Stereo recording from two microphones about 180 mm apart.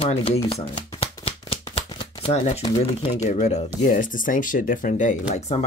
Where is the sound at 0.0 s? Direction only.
35° left (ahead or behind).